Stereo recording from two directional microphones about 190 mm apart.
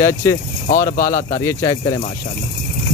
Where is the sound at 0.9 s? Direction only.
45° left (ahead or behind).